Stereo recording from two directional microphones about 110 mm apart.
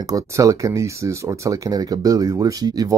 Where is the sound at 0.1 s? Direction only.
30° right (ahead or behind).